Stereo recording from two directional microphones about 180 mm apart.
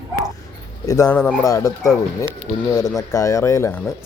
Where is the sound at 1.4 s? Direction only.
20° left (ahead or behind).